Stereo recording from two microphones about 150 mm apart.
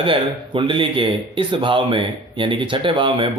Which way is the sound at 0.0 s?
35° right (ahead or behind).